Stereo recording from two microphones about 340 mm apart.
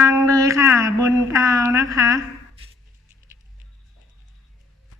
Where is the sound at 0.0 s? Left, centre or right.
Centre.